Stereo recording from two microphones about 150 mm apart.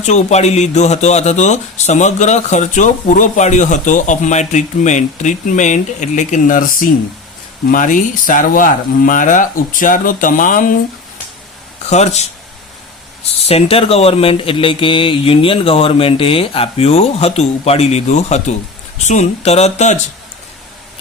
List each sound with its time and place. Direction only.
0.0 s speech: 50° left (ahead or behind)
11.9 s speech: 45° left (ahead or behind)
13.4 s speech: 40° left (ahead or behind)